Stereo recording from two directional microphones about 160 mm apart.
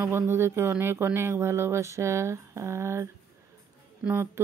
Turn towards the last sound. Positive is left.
turn(degrees=-15)  # may be behind; listen again after turning